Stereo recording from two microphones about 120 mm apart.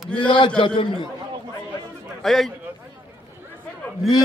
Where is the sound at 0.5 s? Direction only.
40° left (ahead or behind).